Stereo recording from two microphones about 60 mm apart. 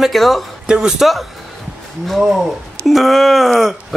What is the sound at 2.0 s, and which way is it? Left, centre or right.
Speech, centre.